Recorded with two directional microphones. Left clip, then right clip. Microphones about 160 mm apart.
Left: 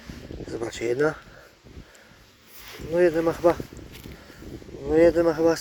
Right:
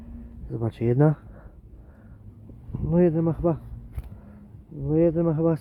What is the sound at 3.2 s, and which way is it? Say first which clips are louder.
Speech: left 5 dB; 5° left (ahead or behind).